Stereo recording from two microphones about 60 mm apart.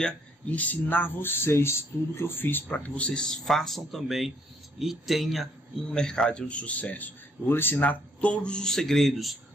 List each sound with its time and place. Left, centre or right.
0.5 s speech: left; by 5.5 s centre
5.9 s speech: centre